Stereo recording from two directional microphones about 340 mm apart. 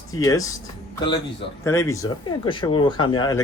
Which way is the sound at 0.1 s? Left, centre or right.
Centre.